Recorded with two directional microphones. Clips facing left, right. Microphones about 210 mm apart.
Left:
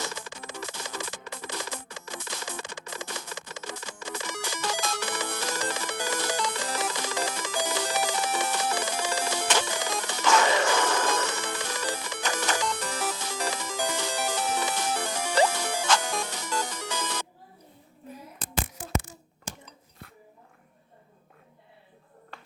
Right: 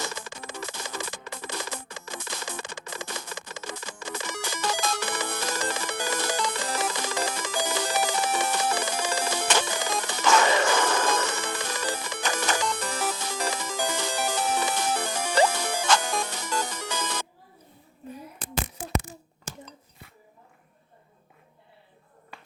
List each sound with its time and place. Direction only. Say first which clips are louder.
0.0 s music: right 1 dB; 55° right (ahead or behind)
13.7 s music: right 1 dB; 90° right
14.0 s music: right 2 dB; 50° right (ahead or behind)